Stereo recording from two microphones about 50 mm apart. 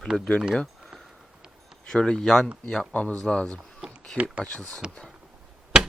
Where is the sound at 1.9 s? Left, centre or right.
Centre.